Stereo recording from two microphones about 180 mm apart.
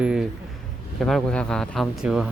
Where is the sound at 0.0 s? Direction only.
5° right (ahead or behind).